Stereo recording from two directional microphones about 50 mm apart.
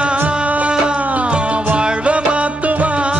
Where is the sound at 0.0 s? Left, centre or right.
Right.